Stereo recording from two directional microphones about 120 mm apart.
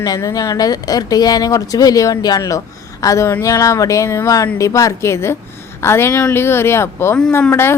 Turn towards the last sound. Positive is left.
turn(degrees=20)  # may be behind; listen again after turning